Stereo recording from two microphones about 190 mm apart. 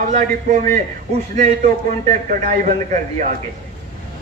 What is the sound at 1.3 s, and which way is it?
A man's voice, 40° right (ahead or behind).